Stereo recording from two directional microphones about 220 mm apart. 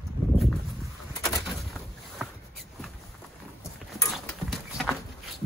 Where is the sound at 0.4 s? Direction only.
Centre (ahead or behind).